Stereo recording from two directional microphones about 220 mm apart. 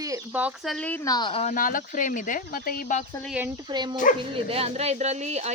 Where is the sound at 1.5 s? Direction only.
40° left (ahead or behind).